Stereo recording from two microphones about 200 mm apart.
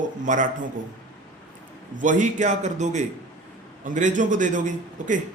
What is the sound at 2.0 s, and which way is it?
Mantra, 40° right (ahead or behind).